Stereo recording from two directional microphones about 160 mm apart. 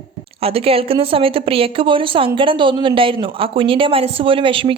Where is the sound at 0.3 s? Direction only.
35° right (ahead or behind).